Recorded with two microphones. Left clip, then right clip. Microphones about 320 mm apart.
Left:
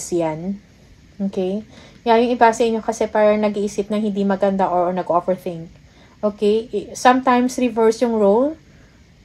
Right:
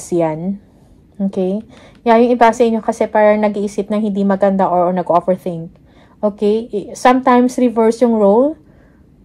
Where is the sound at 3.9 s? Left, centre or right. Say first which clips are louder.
Right 3 dB; right.